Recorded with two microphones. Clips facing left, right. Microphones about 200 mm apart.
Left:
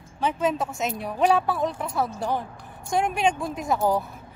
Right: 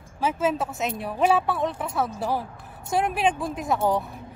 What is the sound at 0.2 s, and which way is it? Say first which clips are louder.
A woman's voice: even; 5° right (ahead or behind).